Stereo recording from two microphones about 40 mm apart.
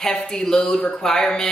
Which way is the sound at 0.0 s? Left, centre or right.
Centre.